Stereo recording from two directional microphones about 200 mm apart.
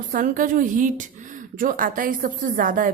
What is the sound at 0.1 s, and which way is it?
A woman's voice, 40° right (ahead or behind).